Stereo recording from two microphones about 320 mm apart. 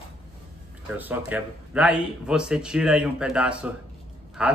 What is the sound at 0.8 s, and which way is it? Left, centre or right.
Speech, centre.